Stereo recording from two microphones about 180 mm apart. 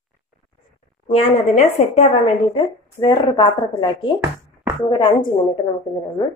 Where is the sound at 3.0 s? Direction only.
25° left (ahead or behind).